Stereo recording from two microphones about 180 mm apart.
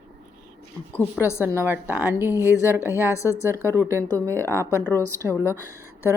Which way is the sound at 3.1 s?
15° left (ahead or behind).